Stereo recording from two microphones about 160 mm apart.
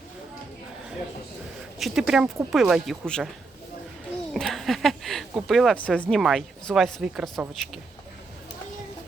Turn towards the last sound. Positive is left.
turn(degrees=0)  # may be behind; listen again after turning